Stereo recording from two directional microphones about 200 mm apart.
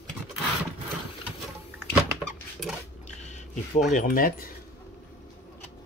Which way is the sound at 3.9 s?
45° left (ahead or behind).